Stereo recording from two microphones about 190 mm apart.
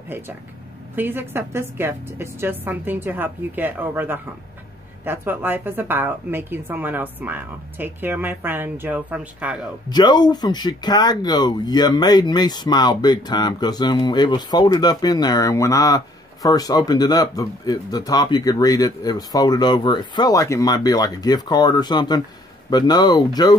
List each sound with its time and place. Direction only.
0.1 s speech: 10° right (ahead or behind)
9.8 s speech: 20° left (ahead or behind)